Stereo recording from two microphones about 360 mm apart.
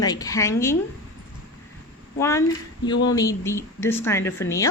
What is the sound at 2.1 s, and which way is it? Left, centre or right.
Speech, centre.